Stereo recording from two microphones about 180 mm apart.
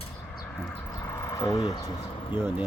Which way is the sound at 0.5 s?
5° left (ahead or behind).